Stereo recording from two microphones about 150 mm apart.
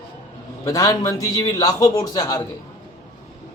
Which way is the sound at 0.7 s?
20° left (ahead or behind).